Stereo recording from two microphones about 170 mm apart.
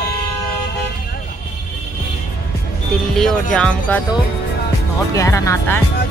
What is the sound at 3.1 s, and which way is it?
Speech, 5° left (ahead or behind).